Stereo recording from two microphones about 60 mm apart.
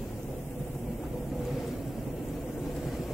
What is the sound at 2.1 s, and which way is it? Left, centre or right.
Vehicle, left.